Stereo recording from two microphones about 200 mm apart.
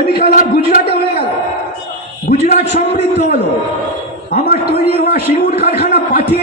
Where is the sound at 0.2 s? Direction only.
45° left (ahead or behind).